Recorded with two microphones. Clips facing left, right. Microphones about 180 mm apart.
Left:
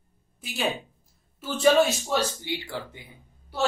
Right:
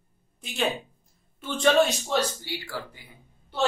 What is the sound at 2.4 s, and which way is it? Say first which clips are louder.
Speech: left 2 dB; 20° left (ahead or behind).